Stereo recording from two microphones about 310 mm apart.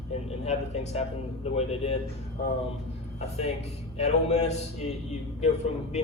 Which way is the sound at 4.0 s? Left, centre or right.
Left.